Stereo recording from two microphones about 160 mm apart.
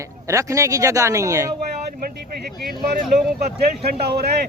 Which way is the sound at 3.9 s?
85° right.